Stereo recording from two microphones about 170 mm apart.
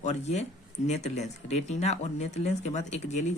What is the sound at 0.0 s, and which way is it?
Speech, 40° left (ahead or behind).